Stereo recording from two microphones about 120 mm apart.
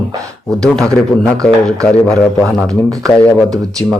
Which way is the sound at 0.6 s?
5° left (ahead or behind).